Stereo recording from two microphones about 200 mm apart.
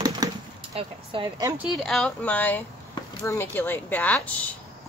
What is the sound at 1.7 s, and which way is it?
Speech, centre (ahead or behind).